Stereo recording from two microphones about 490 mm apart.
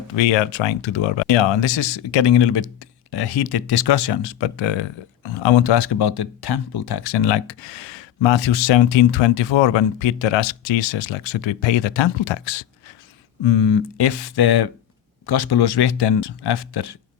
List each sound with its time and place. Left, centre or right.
0.2 s speech: left